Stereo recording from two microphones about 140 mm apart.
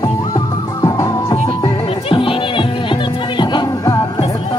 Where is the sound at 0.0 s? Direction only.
25° left (ahead or behind).